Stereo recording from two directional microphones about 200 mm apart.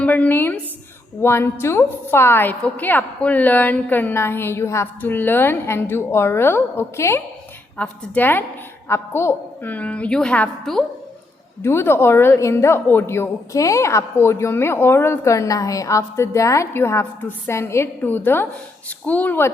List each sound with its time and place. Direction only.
0.0 s a woman's voice: 5° left (ahead or behind)